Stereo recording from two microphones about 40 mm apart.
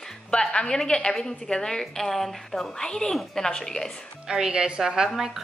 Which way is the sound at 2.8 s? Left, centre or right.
Centre.